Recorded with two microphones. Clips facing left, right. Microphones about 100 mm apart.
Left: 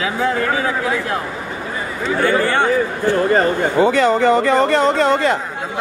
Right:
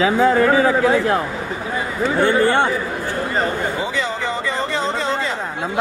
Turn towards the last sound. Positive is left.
turn(degrees=60)  # may be behind; listen again after turning